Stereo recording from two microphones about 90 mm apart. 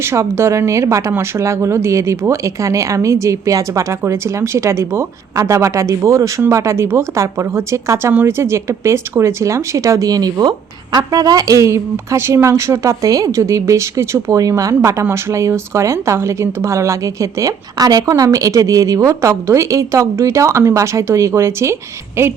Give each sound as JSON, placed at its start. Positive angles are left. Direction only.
{"t": 0.0, "sound": "a woman's voice", "side_deg": -30}